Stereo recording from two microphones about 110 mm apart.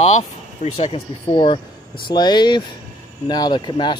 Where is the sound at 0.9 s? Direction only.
50° left (ahead or behind).